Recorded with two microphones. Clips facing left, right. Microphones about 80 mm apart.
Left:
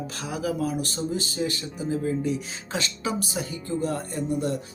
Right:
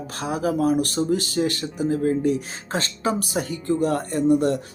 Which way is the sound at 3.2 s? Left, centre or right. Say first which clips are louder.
Right 4 dB; right.